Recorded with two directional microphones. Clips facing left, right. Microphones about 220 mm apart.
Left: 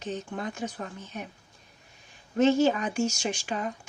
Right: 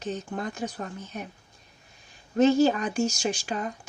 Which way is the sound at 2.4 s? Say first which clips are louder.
Right 2 dB; 40° right (ahead or behind).